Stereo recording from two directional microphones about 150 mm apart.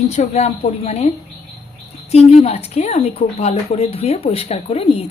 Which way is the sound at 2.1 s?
45° left (ahead or behind).